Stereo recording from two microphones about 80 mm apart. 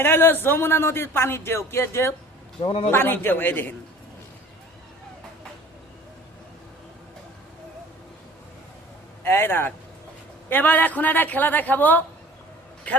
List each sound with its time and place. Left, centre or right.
0.0 s a woman's voice: left
9.2 s a woman's voice: left